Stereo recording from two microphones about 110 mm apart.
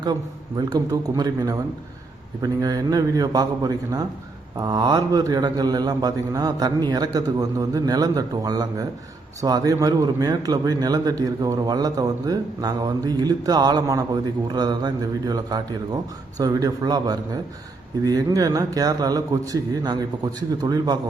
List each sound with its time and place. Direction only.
0.0 s a man's voice: 35° right (ahead or behind)